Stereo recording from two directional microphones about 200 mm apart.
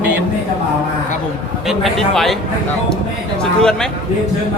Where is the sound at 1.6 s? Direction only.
Centre (ahead or behind).